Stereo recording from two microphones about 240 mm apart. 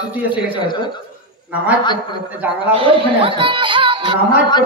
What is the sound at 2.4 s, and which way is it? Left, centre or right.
Speech, centre.